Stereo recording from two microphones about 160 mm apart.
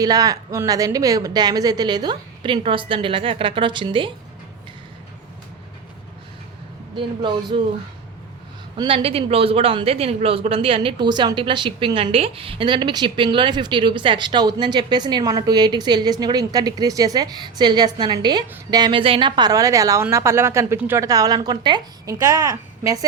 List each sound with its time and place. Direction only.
0.0 s a woman's voice: 20° right (ahead or behind)
6.9 s speech: 30° right (ahead or behind)
8.8 s a woman's voice: 35° right (ahead or behind); by 23.0 s 20° right (ahead or behind)